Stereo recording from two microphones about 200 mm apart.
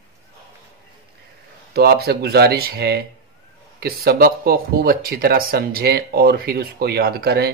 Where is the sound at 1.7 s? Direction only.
50° right (ahead or behind).